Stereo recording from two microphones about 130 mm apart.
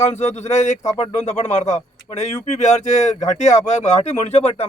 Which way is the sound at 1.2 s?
55° left (ahead or behind).